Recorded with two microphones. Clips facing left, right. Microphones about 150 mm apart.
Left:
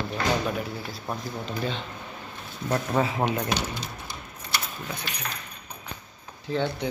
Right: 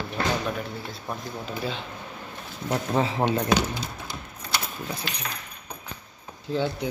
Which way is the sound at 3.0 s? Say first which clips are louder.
Right 1 dB; 30° right (ahead or behind).